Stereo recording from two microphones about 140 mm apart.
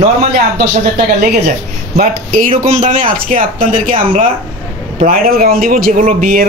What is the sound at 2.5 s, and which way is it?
Speech, 40° right (ahead or behind).